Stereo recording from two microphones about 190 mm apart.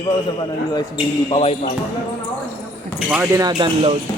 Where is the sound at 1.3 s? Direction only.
35° left (ahead or behind).